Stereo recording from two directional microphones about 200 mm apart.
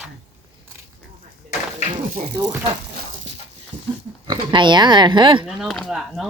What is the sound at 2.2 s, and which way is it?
Speech, 30° right (ahead or behind).